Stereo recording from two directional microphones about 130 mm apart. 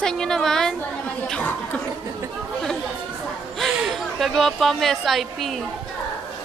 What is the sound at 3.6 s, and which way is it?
A woman's voice, centre (ahead or behind).